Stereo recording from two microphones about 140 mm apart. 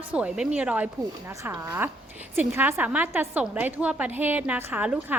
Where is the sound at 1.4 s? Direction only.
20° right (ahead or behind).